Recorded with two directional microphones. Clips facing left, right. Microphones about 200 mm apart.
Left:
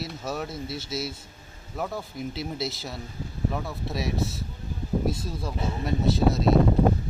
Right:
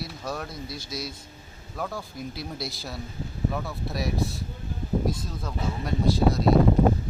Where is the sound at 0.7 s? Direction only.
25° left (ahead or behind).